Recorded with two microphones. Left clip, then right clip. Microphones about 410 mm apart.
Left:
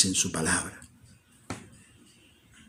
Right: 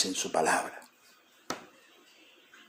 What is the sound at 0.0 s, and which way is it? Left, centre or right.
Speech, left.